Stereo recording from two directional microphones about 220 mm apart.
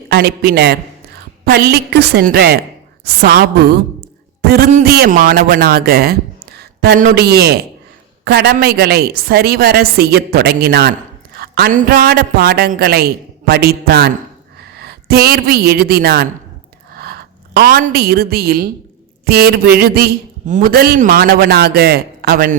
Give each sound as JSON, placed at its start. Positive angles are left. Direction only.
{"t": 0.1, "sound": "a woman's voice", "side_deg": -45}